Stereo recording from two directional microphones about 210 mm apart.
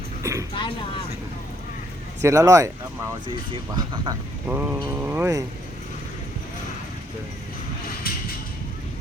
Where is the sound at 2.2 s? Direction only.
15° right (ahead or behind).